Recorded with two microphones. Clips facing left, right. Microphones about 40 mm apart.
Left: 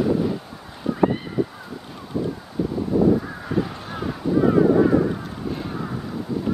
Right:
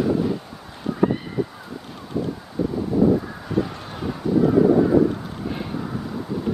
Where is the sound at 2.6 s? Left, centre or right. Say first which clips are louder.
Right 1 dB; centre.